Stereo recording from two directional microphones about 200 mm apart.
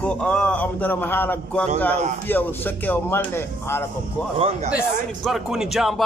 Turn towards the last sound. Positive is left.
turn(degrees=0)  # may be behind; listen again after turning